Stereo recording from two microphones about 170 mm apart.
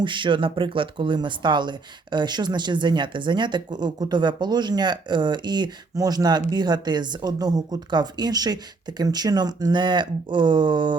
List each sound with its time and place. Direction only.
0.0 s speech: 30° right (ahead or behind)